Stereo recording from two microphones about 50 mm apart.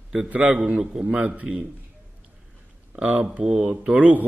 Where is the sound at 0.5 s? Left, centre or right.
Centre.